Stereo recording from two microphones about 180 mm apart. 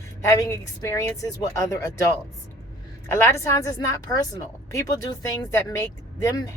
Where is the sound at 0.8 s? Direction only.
20° left (ahead or behind).